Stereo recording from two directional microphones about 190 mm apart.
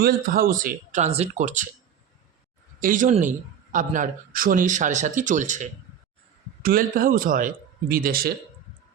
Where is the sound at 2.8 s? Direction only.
45° right (ahead or behind).